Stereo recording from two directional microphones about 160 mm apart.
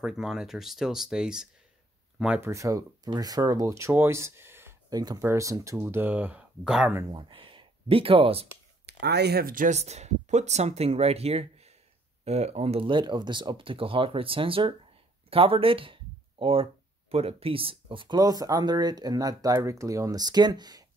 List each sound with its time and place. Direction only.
0.0 s speech: centre (ahead or behind)
2.5 s speech: 20° right (ahead or behind)
7.1 s speech: 30° right (ahead or behind)
8.8 s speech: 90° right; by 9.8 s 60° right (ahead or behind)
9.8 s speech: 45° right (ahead or behind)
15.2 s a sound: 35° right (ahead or behind)
17.1 s speech: 40° right (ahead or behind)